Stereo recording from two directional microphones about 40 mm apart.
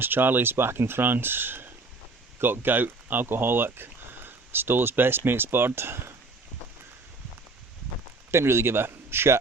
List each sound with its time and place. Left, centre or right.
0.0 s speech: right
8.3 s a man's voice: right